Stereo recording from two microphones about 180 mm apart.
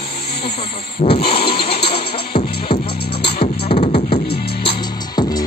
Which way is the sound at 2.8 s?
60° left (ahead or behind).